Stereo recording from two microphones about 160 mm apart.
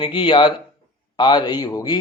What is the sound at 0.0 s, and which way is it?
Speech, 30° left (ahead or behind).